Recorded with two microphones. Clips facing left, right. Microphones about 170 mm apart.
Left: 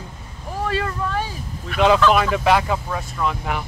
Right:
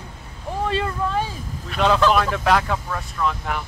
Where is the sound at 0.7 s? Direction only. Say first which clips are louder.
Even; 25° right (ahead or behind).